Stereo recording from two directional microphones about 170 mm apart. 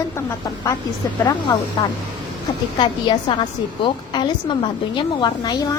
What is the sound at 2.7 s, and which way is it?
A woman's voice, 30° left (ahead or behind).